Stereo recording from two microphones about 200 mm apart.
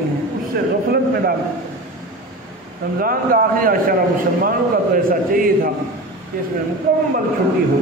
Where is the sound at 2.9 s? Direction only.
45° right (ahead or behind).